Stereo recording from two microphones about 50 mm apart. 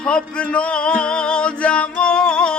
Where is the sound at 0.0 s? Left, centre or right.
Left.